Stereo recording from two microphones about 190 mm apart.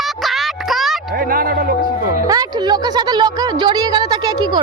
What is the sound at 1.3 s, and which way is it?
Music, 50° right (ahead or behind).